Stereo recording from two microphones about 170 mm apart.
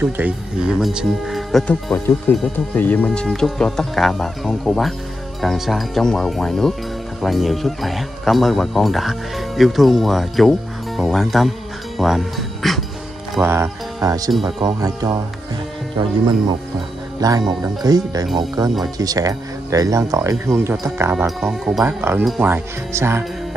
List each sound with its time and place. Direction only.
0.0 s speech: 5° right (ahead or behind)
13.4 s speech: 15° right (ahead or behind)
21.4 s speech: centre (ahead or behind)
22.4 s speech: 15° right (ahead or behind)